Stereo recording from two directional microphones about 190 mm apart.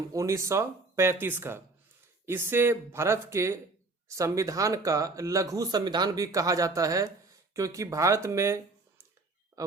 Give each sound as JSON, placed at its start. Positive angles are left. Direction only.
{"t": 0.1, "sound": "speech", "side_deg": -15}